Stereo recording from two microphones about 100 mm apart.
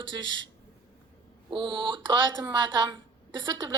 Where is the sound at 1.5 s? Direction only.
55° right (ahead or behind).